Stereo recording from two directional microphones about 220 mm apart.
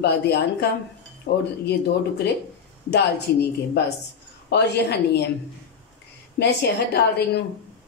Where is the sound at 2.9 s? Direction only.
50° left (ahead or behind).